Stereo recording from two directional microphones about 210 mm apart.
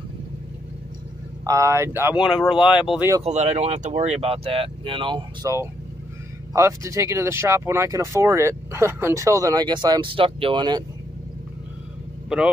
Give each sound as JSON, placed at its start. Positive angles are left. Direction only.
{"t": 1.4, "sound": "speech", "side_deg": -15}
{"t": 2.5, "sound": "speech", "side_deg": 25}
{"t": 2.9, "sound": "speech", "side_deg": -10}
{"t": 3.3, "sound": "speech", "side_deg": -30}
{"t": 12.3, "sound": "speech", "side_deg": 0}